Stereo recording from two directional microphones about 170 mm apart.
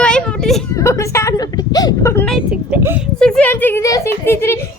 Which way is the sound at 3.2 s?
5° left (ahead or behind).